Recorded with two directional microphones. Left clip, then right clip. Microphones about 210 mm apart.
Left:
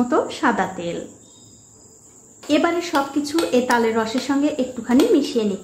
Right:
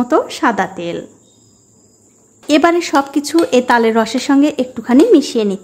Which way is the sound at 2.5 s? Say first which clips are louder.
Right 7 dB; 40° right (ahead or behind).